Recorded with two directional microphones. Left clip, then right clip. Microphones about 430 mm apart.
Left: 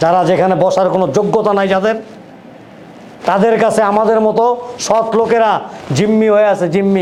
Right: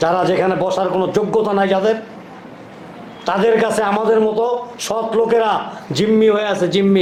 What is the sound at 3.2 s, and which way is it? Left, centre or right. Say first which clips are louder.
A man's voice: left 4 dB; left.